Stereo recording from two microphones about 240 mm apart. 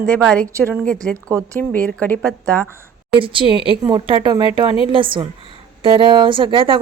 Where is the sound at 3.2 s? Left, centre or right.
Right.